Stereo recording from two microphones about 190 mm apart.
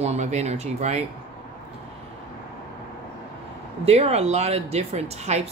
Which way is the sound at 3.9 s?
35° right (ahead or behind).